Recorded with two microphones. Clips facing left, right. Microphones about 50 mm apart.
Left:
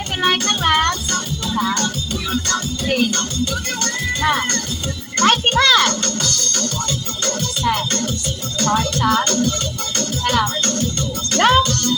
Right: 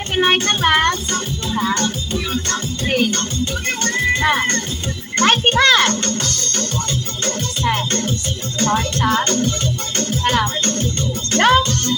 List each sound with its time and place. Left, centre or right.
0.2 s speech: right
1.6 s speech: right
2.1 s music: right
4.2 s a child's voice: right
7.3 s music: right
8.5 s speech: right
11.3 s music: right